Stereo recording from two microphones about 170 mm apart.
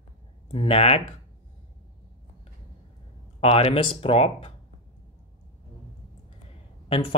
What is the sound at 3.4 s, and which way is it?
Speech, 35° left (ahead or behind).